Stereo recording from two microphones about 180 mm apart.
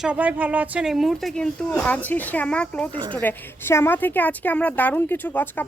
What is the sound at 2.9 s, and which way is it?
Speech, 25° right (ahead or behind).